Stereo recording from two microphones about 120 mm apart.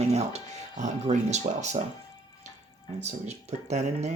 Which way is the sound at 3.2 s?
70° right (ahead or behind).